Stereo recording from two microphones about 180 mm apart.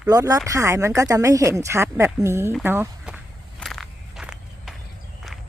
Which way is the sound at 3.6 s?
Centre (ahead or behind).